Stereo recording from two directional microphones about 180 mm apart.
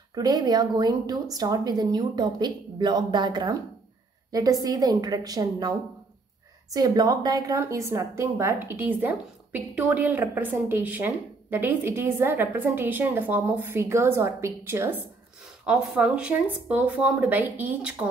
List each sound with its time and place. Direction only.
0.1 s a woman's voice: 20° right (ahead or behind)